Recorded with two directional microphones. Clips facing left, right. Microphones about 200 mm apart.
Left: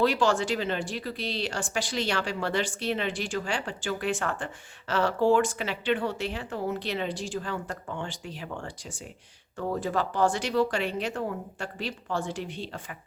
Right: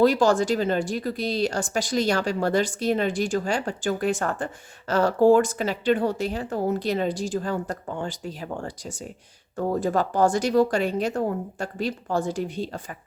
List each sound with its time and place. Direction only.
0.0 s speech: 40° right (ahead or behind)